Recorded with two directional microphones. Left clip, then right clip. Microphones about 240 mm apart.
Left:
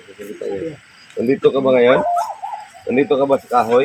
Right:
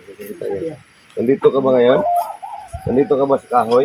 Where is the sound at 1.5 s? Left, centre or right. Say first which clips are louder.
Even; right.